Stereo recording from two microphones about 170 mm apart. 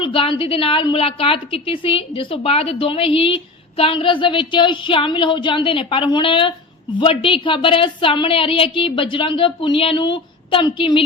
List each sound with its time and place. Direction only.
0.0 s a woman's voice: 30° left (ahead or behind)